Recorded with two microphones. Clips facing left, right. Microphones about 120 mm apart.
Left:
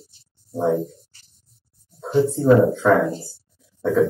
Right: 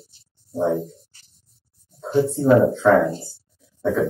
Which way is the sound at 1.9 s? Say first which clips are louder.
Left 1 dB; centre (ahead or behind).